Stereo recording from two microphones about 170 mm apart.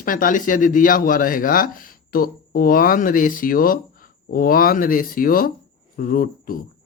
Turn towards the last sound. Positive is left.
turn(degrees=55)  # may be behind; listen again after turning